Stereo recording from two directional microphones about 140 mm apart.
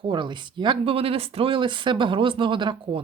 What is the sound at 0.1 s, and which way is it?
Speech, 35° right (ahead or behind).